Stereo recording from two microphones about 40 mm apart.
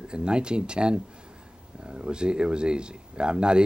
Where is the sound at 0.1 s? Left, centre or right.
Right.